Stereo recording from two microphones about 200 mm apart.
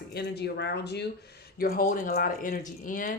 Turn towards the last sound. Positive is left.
turn(degrees=45)  # may be behind; listen again after turning